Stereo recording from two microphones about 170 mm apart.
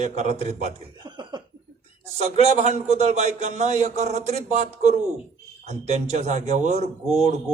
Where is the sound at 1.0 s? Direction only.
25° right (ahead or behind).